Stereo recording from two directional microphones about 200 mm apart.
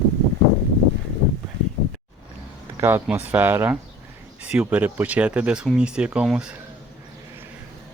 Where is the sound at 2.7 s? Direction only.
10° right (ahead or behind).